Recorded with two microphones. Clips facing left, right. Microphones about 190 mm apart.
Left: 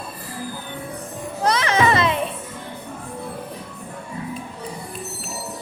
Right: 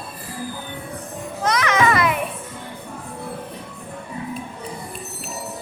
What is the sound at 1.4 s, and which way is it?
Children playing, 30° left (ahead or behind).